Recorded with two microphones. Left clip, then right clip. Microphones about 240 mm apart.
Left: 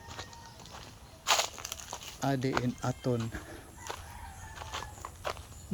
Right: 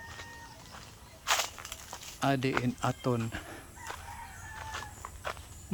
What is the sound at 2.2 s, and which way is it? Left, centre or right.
Speech, centre.